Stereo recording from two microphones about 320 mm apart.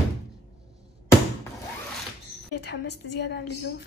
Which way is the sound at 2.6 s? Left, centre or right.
Left.